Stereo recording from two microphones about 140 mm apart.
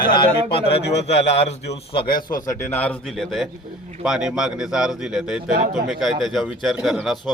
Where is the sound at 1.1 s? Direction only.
50° left (ahead or behind).